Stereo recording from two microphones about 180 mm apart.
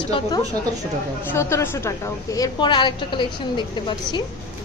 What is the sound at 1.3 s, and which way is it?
A woman's voice, 15° left (ahead or behind).